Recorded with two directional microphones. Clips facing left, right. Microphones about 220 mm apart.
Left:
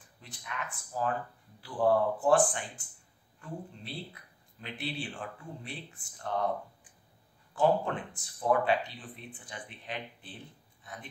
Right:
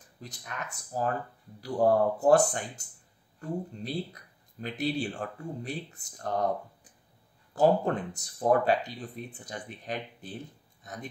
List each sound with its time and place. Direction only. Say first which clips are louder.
0.2 s speech: right 1 dB; 40° right (ahead or behind)